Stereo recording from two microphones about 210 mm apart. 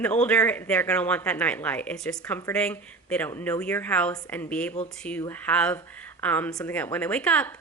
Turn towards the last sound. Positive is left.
turn(degrees=5)  # may be behind; listen again after turning